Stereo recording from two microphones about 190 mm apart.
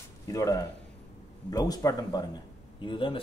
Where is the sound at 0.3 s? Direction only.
15° left (ahead or behind).